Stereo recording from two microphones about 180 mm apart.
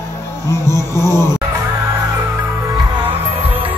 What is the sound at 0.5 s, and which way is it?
Speech, 15° left (ahead or behind).